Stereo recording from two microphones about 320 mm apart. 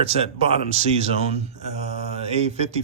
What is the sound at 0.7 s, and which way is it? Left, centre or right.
Speech, centre.